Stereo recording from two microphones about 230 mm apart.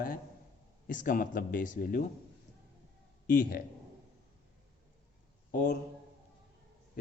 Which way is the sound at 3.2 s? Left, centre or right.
Left.